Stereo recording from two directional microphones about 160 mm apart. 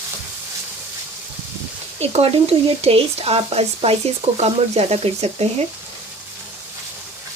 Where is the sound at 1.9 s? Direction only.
40° right (ahead or behind).